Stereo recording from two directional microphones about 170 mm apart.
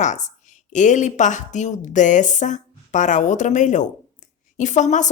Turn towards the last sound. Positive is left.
turn(degrees=45)  # may be behind; listen again after turning